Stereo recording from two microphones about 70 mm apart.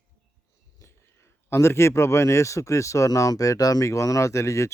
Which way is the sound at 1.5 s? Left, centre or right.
Left.